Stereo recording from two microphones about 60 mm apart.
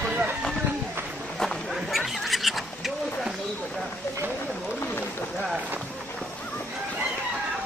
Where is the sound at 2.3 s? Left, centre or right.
Centre.